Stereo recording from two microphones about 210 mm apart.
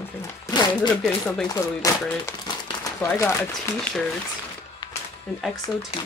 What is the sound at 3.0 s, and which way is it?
Speech, 15° left (ahead or behind).